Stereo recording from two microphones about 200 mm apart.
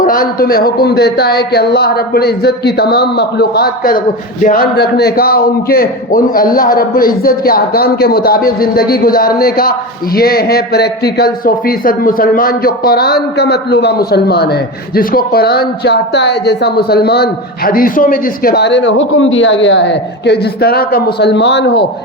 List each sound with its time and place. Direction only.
0.0 s a man's voice: 45° left (ahead or behind); by 21.8 s 60° left (ahead or behind)